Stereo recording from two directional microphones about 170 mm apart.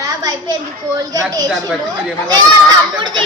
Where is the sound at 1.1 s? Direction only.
20° right (ahead or behind).